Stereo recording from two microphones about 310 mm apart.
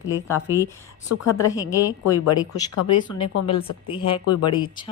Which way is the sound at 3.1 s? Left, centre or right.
Centre.